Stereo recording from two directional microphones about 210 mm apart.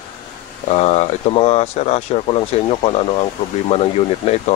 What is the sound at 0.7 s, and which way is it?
Speech, 30° left (ahead or behind).